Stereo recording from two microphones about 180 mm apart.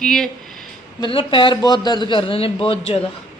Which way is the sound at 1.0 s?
30° left (ahead or behind).